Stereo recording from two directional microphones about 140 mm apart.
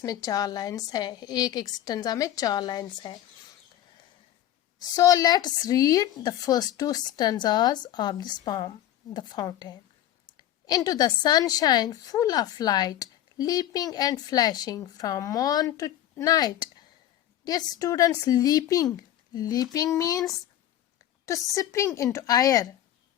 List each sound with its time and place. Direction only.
0.0 s a woman's voice: 25° left (ahead or behind)
4.9 s a woman's voice: 25° left (ahead or behind)
21.5 s a woman's voice: 20° left (ahead or behind)